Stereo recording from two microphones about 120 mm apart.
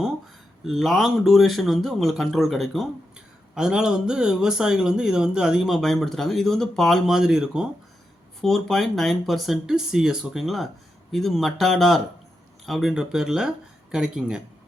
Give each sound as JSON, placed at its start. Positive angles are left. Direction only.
{"t": 0.6, "sound": "speech", "side_deg": 0}